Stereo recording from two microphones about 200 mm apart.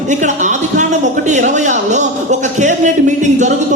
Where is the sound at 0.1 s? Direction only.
40° right (ahead or behind).